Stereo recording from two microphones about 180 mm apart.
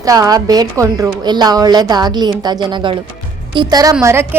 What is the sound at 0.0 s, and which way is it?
A woman's voice, 20° right (ahead or behind).